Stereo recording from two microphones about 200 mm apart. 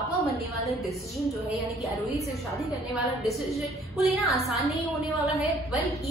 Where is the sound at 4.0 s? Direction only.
Centre (ahead or behind).